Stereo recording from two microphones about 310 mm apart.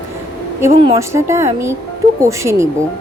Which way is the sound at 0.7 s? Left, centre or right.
Centre.